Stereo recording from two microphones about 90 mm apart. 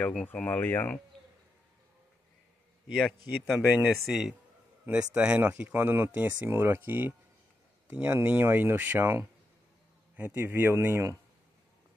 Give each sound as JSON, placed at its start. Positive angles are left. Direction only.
{"t": 0.0, "sound": "speech", "side_deg": 15}
{"t": 2.9, "sound": "a man's voice", "side_deg": 0}
{"t": 3.6, "sound": "a man's voice", "side_deg": -15}
{"t": 4.8, "sound": "a man's voice", "side_deg": -15}